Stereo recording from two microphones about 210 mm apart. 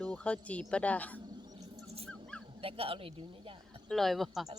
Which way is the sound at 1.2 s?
20° right (ahead or behind).